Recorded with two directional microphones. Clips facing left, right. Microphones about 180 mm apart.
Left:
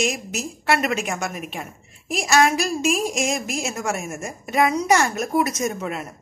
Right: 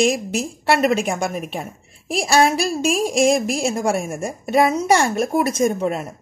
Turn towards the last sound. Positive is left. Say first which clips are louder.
# right 7 dB
turn(degrees=-30)  # may be behind; listen again after turning